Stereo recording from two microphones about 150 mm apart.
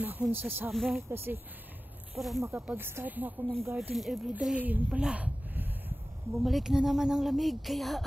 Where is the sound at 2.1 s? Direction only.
Centre (ahead or behind).